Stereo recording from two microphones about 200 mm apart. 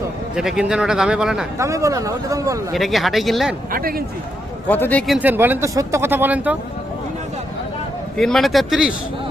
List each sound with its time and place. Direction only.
0.3 s a man's voice: 5° right (ahead or behind)
1.5 s speech: 15° right (ahead or behind)
2.7 s a man's voice: centre (ahead or behind)
3.7 s a man's voice: 45° right (ahead or behind)
4.7 s speech: 10° left (ahead or behind); by 6.6 s 10° right (ahead or behind)
8.1 s a man's voice: 5° left (ahead or behind)